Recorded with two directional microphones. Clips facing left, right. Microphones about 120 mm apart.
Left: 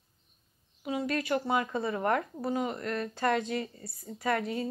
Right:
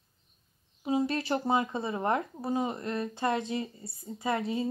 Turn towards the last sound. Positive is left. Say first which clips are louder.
# even
turn(degrees=-20)  # may be behind; listen again after turning